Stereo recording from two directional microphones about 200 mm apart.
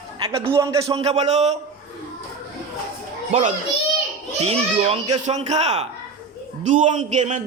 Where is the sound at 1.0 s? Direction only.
35° right (ahead or behind).